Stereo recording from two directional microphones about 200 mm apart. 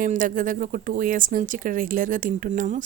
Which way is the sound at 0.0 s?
40° right (ahead or behind).